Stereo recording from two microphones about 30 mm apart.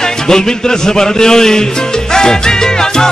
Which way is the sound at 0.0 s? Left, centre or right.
Left.